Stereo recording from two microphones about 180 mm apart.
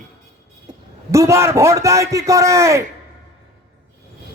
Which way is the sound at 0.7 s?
15° right (ahead or behind).